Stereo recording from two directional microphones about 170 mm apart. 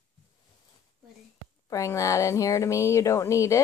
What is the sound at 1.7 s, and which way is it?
Speech, 20° left (ahead or behind).